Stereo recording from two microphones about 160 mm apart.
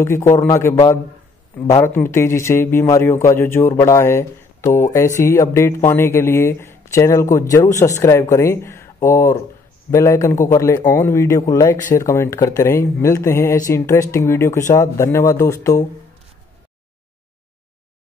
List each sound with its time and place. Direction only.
0.0 s a man's voice: 15° left (ahead or behind)